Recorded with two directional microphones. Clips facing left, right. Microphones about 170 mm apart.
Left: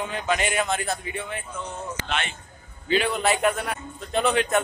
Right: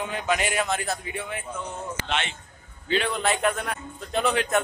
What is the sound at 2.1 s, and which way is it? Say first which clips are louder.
Speech: right 1 dB; 25° right (ahead or behind).